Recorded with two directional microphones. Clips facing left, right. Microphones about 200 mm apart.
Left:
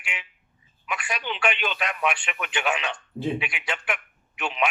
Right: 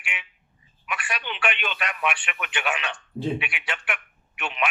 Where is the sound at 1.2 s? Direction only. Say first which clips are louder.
Left 3 dB; 35° left (ahead or behind).